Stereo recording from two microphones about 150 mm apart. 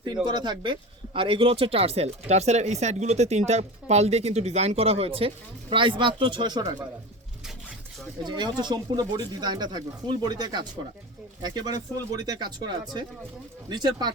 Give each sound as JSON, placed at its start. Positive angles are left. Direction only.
{"t": 0.3, "sound": "speech", "side_deg": -30}
{"t": 8.2, "sound": "speech", "side_deg": -30}